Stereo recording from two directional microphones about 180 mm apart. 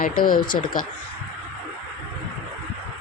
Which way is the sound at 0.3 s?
50° left (ahead or behind).